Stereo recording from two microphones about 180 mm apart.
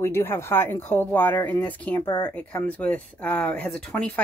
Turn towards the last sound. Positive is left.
turn(degrees=5)  # may be behind; listen again after turning